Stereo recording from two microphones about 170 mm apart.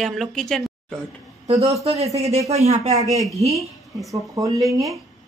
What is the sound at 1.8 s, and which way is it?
Speech, 35° right (ahead or behind).